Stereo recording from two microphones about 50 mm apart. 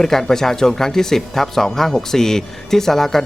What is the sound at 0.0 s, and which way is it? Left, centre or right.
Speech, centre.